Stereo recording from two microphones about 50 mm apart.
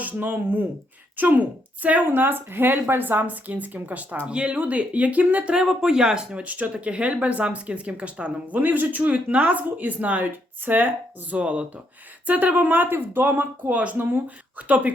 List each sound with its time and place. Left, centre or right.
0.0 s a woman's voice: right
5.5 s speech: centre
6.4 s speech: right